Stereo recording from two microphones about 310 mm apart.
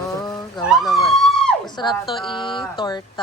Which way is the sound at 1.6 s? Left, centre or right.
Centre.